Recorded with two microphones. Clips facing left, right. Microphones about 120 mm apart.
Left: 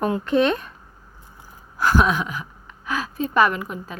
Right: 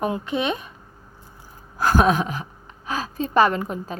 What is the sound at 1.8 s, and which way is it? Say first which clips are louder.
A woman's voice: right 1 dB; 40° right (ahead or behind).